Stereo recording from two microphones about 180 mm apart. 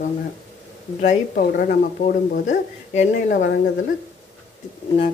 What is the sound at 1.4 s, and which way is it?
A woman's voice, 50° left (ahead or behind).